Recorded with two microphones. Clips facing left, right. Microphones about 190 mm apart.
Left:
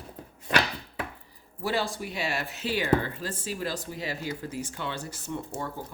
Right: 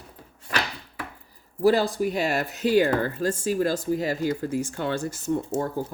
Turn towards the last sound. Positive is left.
turn(degrees=-45)  # may be behind; listen again after turning